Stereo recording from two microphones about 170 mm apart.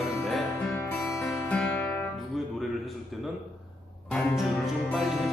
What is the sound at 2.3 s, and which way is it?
Music, centre (ahead or behind).